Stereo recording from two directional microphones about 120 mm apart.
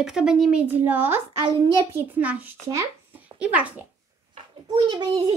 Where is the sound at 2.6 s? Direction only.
25° right (ahead or behind).